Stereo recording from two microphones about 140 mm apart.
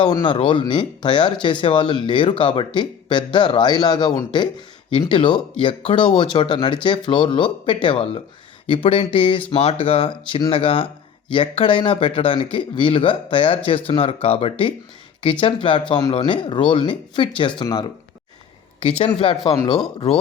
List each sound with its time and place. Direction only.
0.0 s speech: 35° left (ahead or behind)
18.8 s speech: 45° left (ahead or behind)